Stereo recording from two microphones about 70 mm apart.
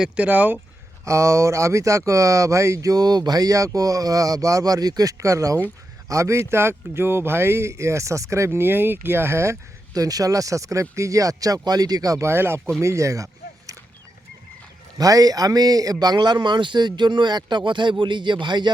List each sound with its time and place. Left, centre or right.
0.2 s speech: right
1.0 s speech: right
9.9 s speech: right
12.3 s speech: right
14.9 s a man's voice: right